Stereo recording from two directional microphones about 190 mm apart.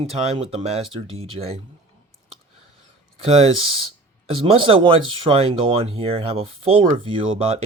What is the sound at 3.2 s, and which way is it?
Speech, 30° right (ahead or behind).